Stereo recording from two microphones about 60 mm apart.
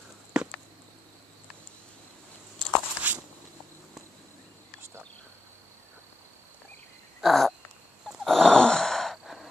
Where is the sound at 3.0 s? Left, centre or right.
Right.